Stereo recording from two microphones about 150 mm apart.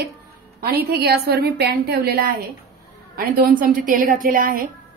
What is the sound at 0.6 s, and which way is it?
A woman's voice, 85° right.